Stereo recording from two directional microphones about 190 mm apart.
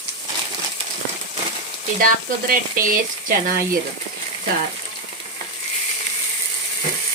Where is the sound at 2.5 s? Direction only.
50° right (ahead or behind).